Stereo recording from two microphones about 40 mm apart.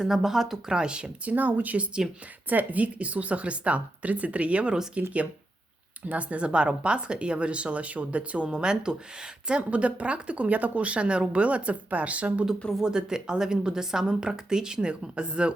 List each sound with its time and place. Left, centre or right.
0.0 s speech: centre
0.7 s a woman's voice: right
1.3 s a woman's voice: right
8.4 s a woman's voice: centre
9.6 s speech: right
12.8 s a woman's voice: centre